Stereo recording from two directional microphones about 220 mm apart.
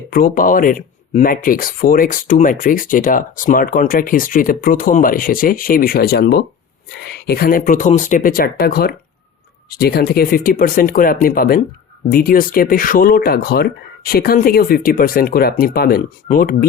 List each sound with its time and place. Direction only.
0.1 s speech: 40° left (ahead or behind)